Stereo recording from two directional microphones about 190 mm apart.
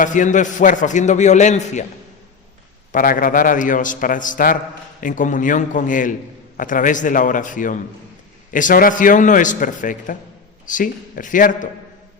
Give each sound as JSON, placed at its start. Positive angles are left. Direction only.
{"t": 0.0, "sound": "a man's voice", "side_deg": 40}
{"t": 2.9, "sound": "a man's voice", "side_deg": 45}